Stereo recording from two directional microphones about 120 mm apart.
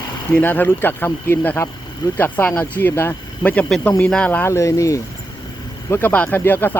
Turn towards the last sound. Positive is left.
turn(degrees=20)  # may be behind; listen again after turning